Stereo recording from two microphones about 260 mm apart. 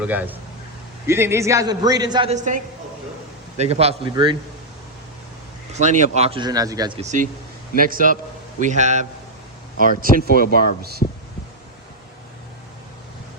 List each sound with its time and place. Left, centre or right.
0.0 s a man's voice: centre; by 2.6 s right
3.6 s speech: right
5.7 s speech: right
10.2 s speech: left